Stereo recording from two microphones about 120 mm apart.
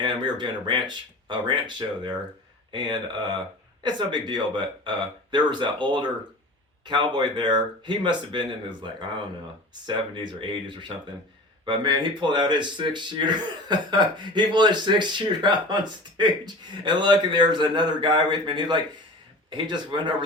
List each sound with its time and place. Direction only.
0.0 s speech: 40° right (ahead or behind)